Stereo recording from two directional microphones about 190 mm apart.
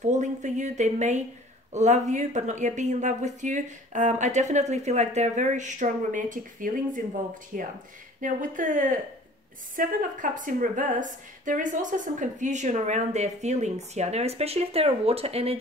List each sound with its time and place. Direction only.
0.0 s a woman's voice: 40° right (ahead or behind)